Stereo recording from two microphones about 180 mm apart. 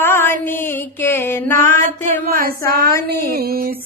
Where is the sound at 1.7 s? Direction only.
45° right (ahead or behind).